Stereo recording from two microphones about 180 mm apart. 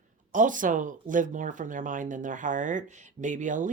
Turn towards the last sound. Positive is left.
turn(degrees=-45)  # may be behind; listen again after turning